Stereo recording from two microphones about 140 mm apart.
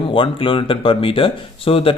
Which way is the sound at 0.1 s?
40° left (ahead or behind).